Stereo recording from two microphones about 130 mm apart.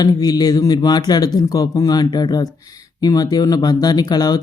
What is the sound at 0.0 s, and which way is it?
A man's voice, 30° left (ahead or behind).